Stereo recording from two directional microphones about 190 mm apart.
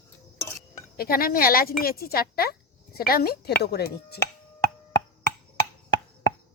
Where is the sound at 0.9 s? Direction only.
50° left (ahead or behind).